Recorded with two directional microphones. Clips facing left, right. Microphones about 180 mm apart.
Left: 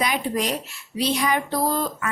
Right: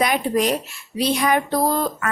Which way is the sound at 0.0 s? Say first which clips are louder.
Right 5 dB; 55° right (ahead or behind).